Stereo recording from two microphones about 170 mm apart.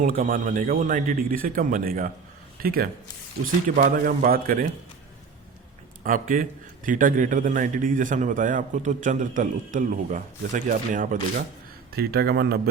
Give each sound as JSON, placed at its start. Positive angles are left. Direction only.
{"t": 0.0, "sound": "a man's voice", "side_deg": -55}
{"t": 6.0, "sound": "a man's voice", "side_deg": -55}
{"t": 11.9, "sound": "speech", "side_deg": -65}